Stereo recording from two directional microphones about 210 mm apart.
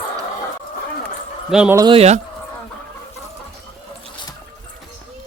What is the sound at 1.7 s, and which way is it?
Speech, 20° right (ahead or behind).